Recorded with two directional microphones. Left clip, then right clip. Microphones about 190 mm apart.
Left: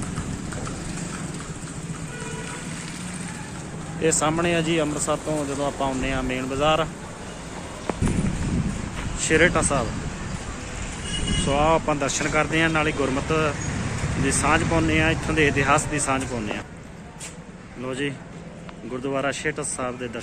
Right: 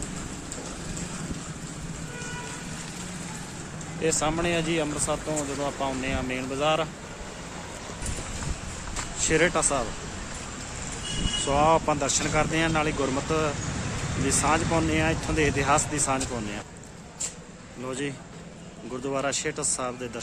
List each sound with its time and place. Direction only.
4.0 s speech: centre (ahead or behind)
9.3 s speech: 10° right (ahead or behind)
11.4 s speech: 15° right (ahead or behind)
17.8 s speech: 15° right (ahead or behind)